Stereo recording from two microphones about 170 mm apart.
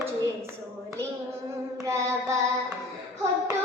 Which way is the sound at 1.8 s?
20° right (ahead or behind).